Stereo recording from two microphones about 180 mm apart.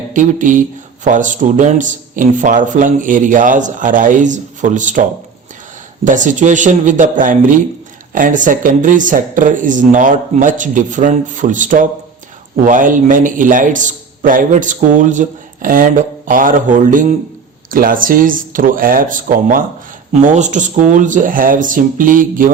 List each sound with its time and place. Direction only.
0.1 s a man's voice: 45° right (ahead or behind)
6.1 s a man's voice: 45° right (ahead or behind)